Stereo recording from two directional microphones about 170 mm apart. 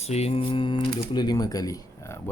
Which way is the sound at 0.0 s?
40° left (ahead or behind).